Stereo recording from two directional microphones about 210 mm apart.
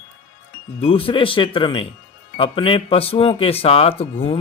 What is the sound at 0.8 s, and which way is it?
Speech, 25° left (ahead or behind).